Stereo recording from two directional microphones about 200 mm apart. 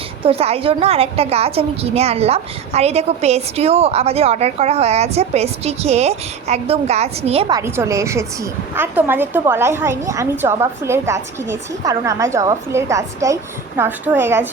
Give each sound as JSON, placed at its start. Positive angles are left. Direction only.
{"t": 0.3, "sound": "a woman's voice", "side_deg": -30}
{"t": 7.5, "sound": "a woman's voice", "side_deg": -15}